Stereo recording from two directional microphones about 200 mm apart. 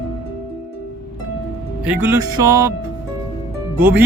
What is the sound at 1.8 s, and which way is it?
Speech, 10° right (ahead or behind).